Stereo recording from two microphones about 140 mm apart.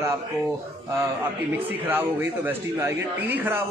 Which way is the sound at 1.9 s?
15° right (ahead or behind).